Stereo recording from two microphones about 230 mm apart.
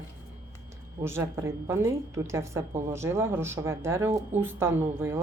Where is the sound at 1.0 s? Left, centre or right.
Centre.